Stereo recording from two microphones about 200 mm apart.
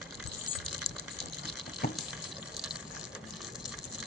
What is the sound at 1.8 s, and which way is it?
Water, 50° left (ahead or behind).